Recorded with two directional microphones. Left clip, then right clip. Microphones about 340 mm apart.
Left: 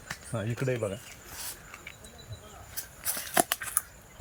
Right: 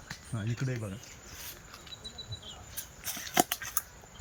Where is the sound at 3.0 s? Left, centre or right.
Centre.